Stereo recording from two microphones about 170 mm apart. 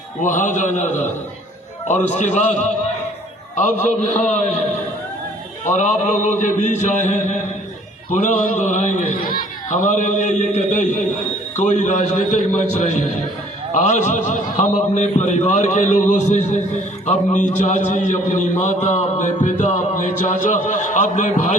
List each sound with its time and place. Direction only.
0.2 s a man's voice: 50° left (ahead or behind)
2.1 s a man's voice: 45° left (ahead or behind)